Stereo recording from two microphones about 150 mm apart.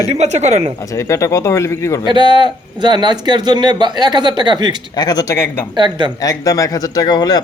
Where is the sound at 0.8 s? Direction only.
20° left (ahead or behind).